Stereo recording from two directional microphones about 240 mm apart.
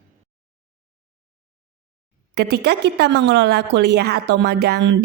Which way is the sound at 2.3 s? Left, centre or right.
Right.